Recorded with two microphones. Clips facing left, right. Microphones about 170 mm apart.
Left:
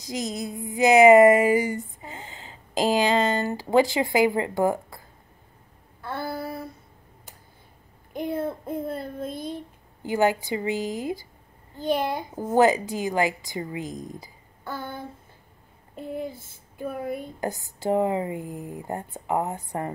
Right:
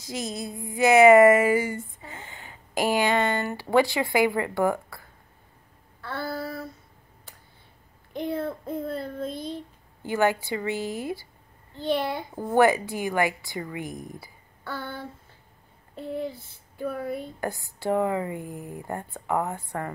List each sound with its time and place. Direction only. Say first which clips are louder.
0.0 s a sound: left 2 dB; 20° left (ahead or behind)
3.7 s a woman's voice: left 1 dB; 20° left (ahead or behind)
5.9 s a sound: left 1 dB; 20° left (ahead or behind)
8.1 s a sound: even; 45° left (ahead or behind)
8.6 s child singing: even; 50° left (ahead or behind)
10.0 s a woman's voice: left 1 dB; 20° left (ahead or behind)
11.8 s child singing: left 1 dB; 45° left (ahead or behind)
12.4 s a woman's voice: left 1 dB; 20° left (ahead or behind)
16.2 s child singing: right 2 dB; 50° left (ahead or behind)
17.4 s a woman's voice: left 1 dB; 20° left (ahead or behind)